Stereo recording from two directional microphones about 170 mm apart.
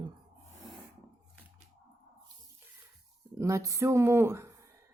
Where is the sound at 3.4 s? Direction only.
20° right (ahead or behind).